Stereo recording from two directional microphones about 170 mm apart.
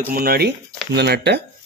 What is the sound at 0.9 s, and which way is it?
Speech, 85° right.